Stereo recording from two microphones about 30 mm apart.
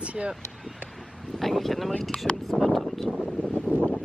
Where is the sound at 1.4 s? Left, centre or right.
Centre.